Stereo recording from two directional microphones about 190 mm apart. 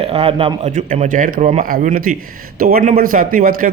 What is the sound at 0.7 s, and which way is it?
A man's voice, 40° right (ahead or behind).